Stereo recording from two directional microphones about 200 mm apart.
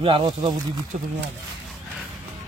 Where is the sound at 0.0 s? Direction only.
25° right (ahead or behind).